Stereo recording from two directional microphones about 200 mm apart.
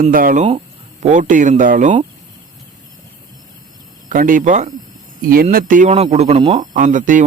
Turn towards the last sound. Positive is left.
turn(degrees=-40)  # may be behind; listen again after turning